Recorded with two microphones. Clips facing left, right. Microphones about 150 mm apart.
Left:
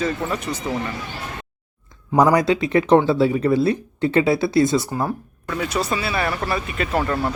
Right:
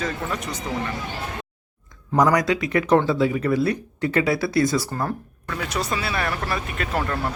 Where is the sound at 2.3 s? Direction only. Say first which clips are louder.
Left 3 dB; 25° left (ahead or behind).